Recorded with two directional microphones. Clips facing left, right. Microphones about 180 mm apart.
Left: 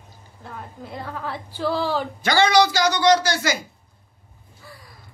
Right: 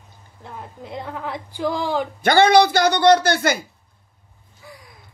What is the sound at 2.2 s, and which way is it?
Speech, 55° right (ahead or behind).